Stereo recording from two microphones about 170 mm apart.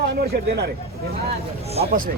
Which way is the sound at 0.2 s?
75° right (ahead or behind).